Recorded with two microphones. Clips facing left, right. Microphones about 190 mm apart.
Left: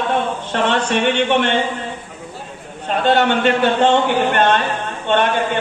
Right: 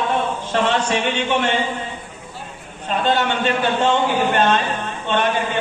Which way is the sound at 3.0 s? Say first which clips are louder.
Left 5 dB; 55° left (ahead or behind).